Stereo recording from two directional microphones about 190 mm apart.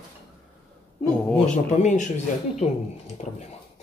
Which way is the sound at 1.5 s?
40° left (ahead or behind).